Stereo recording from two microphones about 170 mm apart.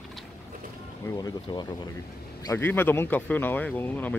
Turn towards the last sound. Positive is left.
turn(degrees=10)  # may be behind; listen again after turning